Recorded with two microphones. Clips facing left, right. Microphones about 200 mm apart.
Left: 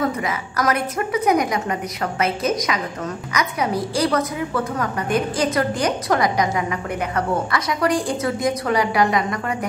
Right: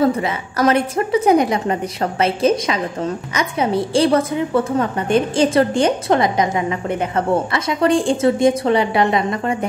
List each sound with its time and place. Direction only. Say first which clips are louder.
0.0 s a woman's voice: right 5 dB; 30° right (ahead or behind)